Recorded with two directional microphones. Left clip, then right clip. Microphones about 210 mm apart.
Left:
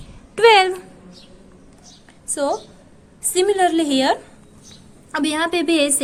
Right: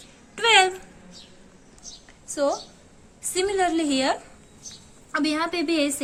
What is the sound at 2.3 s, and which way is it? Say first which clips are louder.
A woman's voice: left 3 dB; 25° left (ahead or behind).